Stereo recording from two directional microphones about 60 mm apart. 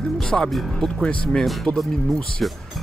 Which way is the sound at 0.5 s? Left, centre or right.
Centre.